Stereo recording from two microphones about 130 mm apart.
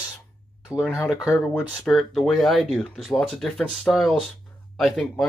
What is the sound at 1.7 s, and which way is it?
Speech, centre (ahead or behind).